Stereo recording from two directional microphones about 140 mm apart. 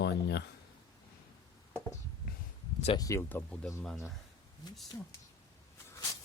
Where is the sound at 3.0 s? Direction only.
25° left (ahead or behind).